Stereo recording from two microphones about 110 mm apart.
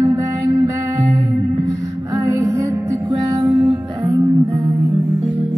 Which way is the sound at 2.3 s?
25° right (ahead or behind).